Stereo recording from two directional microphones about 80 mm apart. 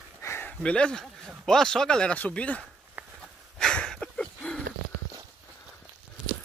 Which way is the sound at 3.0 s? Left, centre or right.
Right.